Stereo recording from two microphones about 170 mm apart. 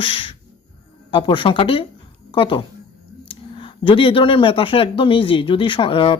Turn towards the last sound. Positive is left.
turn(degrees=30)  # may be behind; listen again after turning